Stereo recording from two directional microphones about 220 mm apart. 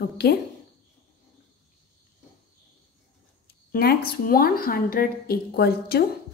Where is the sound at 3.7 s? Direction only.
45° left (ahead or behind).